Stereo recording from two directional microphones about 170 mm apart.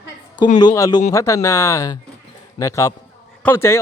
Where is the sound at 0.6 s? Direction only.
20° left (ahead or behind).